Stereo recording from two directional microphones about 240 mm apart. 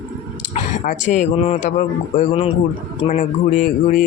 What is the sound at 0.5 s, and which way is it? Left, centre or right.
Speech, left.